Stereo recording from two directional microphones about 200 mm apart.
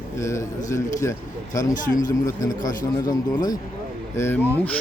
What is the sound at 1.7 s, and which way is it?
Speech, 40° left (ahead or behind).